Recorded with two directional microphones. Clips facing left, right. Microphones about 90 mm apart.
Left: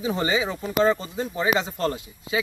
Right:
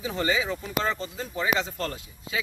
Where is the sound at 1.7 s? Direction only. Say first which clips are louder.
Left 6 dB; 30° left (ahead or behind).